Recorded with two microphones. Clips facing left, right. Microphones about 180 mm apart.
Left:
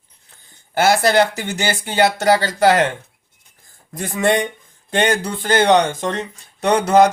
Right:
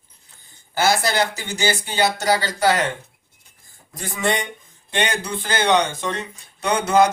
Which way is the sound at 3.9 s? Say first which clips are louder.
Left 6 dB; 55° left (ahead or behind).